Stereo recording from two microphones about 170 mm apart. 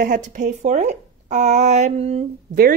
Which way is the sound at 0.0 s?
50° right (ahead or behind).